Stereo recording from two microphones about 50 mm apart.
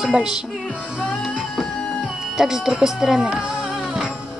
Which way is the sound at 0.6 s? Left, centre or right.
Left.